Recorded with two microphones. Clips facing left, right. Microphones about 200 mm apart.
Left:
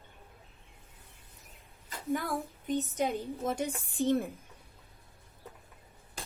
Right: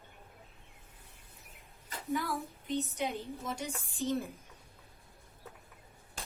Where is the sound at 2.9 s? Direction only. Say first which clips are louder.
Left 5 dB; 50° left (ahead or behind).